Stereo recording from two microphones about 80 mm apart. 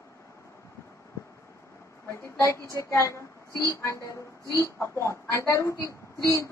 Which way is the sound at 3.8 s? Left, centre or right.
Left.